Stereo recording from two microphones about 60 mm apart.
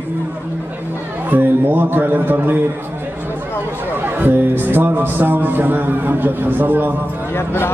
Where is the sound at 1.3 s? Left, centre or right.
Right.